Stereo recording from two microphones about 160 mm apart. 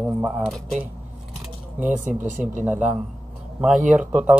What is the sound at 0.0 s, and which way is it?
Speech, 10° right (ahead or behind).